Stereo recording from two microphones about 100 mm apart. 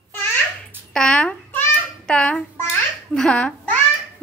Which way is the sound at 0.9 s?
10° left (ahead or behind).